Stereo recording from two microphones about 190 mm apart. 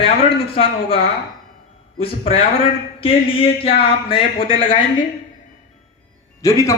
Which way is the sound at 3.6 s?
30° left (ahead or behind).